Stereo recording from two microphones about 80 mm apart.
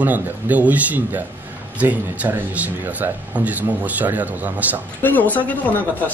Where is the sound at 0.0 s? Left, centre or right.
Right.